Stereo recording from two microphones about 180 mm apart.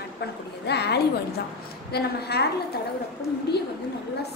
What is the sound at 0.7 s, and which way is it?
A woman's voice, 65° left (ahead or behind).